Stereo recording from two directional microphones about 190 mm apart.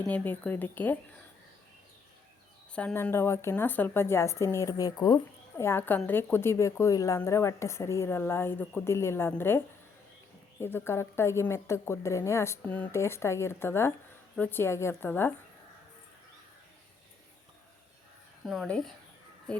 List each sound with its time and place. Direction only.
0.0 s a woman's voice: 10° left (ahead or behind)
2.7 s a woman's voice: 10° left (ahead or behind)
18.4 s speech: centre (ahead or behind)